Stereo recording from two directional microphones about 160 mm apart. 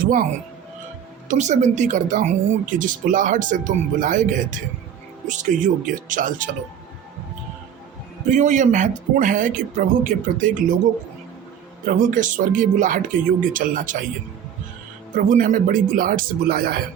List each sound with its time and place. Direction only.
0.0 s speech: 55° right (ahead or behind)
1.3 s speech: 45° right (ahead or behind)
8.3 s speech: 50° right (ahead or behind)
11.9 s speech: 55° right (ahead or behind)
15.1 s speech: 55° right (ahead or behind)